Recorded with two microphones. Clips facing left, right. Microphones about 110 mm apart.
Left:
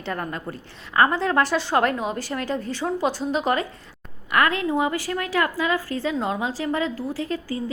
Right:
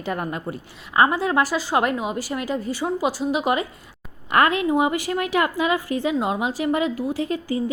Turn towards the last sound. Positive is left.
turn(degrees=-20)  # may be behind; listen again after turning